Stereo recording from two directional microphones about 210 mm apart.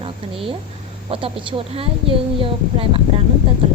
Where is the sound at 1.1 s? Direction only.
25° right (ahead or behind).